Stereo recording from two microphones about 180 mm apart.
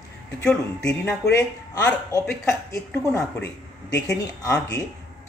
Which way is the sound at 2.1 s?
15° left (ahead or behind).